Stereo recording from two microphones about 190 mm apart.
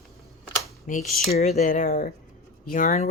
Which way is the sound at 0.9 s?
45° left (ahead or behind).